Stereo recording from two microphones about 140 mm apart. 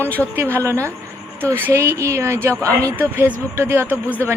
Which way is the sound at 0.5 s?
20° right (ahead or behind).